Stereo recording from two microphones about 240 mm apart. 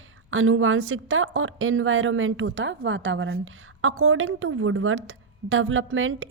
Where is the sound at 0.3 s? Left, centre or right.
Right.